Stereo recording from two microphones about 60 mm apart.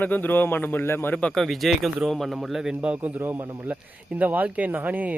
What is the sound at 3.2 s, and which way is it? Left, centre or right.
Speech, right.